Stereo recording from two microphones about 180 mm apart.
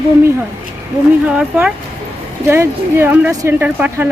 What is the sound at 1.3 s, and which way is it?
A woman's voice, 5° right (ahead or behind).